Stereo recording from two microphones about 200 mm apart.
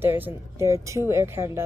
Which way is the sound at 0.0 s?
10° right (ahead or behind).